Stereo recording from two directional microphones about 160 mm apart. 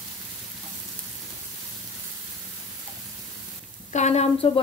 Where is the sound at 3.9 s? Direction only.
45° left (ahead or behind).